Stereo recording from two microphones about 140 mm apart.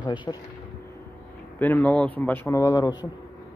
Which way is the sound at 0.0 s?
35° left (ahead or behind).